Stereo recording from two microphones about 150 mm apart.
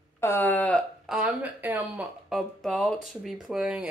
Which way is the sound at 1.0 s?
5° right (ahead or behind).